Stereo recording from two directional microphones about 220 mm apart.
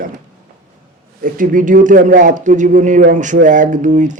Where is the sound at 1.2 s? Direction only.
40° right (ahead or behind).